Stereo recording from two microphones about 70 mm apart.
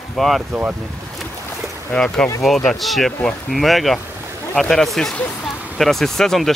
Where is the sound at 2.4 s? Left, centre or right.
Centre.